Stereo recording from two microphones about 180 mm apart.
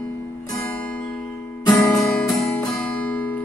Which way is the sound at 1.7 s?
20° left (ahead or behind).